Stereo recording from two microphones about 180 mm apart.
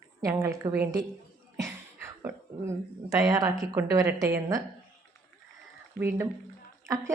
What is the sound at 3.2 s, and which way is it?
Speech, 20° right (ahead or behind).